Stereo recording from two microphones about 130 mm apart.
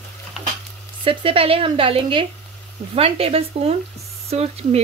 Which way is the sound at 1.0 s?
45° right (ahead or behind).